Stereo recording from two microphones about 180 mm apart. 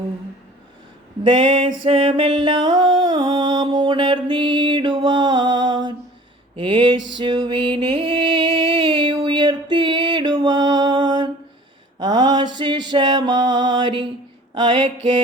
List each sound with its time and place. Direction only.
1.2 s music: 25° right (ahead or behind)
11.9 s mantra: 25° right (ahead or behind)
14.5 s music: 25° right (ahead or behind)